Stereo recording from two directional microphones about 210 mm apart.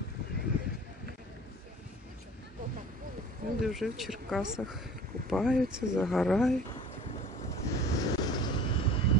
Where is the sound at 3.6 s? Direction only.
Centre (ahead or behind).